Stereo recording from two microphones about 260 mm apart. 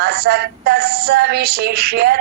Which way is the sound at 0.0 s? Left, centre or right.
Right.